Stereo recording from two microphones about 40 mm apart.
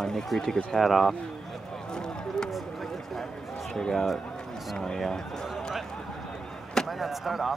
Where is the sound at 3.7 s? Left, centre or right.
Centre.